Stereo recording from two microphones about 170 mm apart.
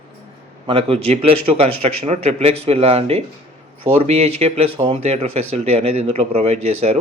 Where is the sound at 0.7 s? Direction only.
35° right (ahead or behind).